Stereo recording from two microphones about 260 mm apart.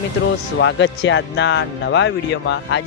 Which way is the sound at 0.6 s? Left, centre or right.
Left.